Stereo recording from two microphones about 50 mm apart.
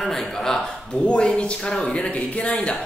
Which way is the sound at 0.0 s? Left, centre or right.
Centre.